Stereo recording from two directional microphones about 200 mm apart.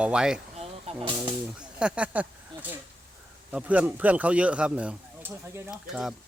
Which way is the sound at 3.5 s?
5° right (ahead or behind).